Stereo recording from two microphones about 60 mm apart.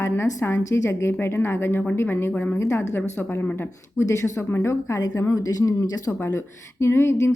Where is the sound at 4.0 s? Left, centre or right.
Left.